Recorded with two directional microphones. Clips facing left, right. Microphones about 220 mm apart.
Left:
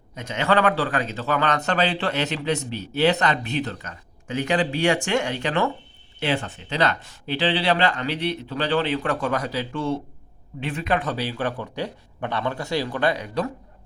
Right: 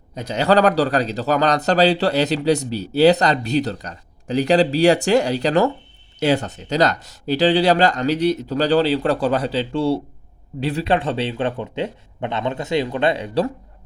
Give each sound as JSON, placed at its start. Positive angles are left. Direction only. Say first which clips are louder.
{"t": 0.1, "sound": "a man's voice", "louder": "right 5 dB", "side_deg": -35}